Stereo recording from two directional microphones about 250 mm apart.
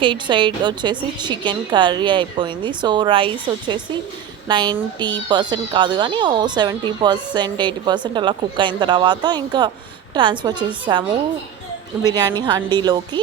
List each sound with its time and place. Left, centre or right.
0.0 s a woman's voice: centre
12.0 s speech: centre